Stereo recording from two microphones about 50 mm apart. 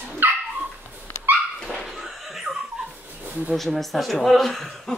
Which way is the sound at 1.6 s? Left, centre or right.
Centre.